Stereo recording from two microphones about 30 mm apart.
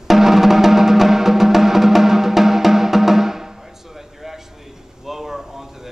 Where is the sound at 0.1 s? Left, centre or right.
Centre.